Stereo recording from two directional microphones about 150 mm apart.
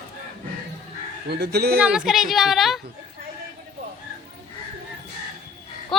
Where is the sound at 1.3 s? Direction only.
90° right.